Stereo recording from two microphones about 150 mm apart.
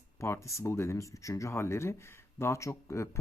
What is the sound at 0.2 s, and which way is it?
Speech, 20° left (ahead or behind).